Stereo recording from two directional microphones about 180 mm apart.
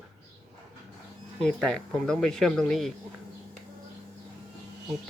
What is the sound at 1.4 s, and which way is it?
Speech, 5° left (ahead or behind).